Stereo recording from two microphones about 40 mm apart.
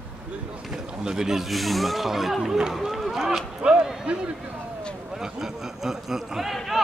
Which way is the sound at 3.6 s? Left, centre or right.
Right.